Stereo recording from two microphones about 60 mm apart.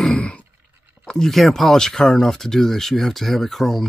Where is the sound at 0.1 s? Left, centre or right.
Centre.